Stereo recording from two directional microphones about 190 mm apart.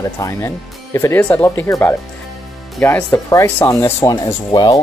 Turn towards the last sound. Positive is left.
turn(degrees=20)  # may be behind; listen again after turning